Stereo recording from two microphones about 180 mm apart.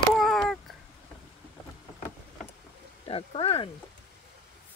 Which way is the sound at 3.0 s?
30° left (ahead or behind).